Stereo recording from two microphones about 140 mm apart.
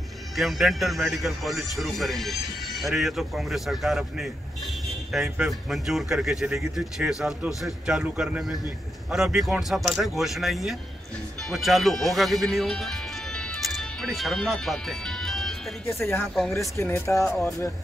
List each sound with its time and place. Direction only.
0.4 s speech: centre (ahead or behind)
15.9 s speech: 15° left (ahead or behind)